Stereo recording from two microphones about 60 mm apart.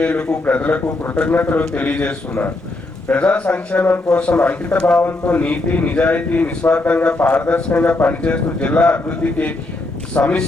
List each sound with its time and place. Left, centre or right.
0.0 s a man's voice: left